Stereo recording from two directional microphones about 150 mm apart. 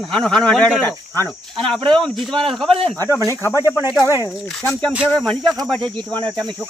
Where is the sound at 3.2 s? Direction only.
20° left (ahead or behind).